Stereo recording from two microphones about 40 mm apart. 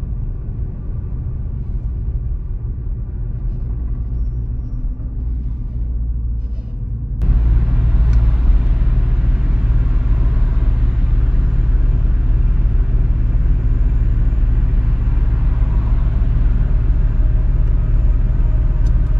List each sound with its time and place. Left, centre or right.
7.2 s vehicle: centre